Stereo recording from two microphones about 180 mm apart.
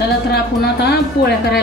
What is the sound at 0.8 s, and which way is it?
Speech, 65° left (ahead or behind).